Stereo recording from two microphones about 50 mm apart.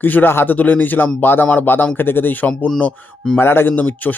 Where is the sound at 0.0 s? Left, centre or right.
Left.